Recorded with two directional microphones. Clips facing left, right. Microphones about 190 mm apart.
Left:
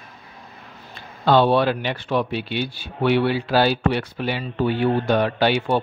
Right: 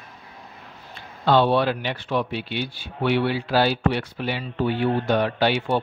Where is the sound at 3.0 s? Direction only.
40° left (ahead or behind).